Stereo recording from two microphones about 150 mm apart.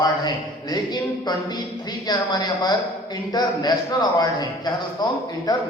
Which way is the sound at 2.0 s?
30° left (ahead or behind).